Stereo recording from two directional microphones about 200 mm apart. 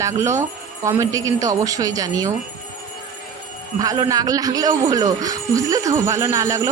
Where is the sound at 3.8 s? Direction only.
15° right (ahead or behind).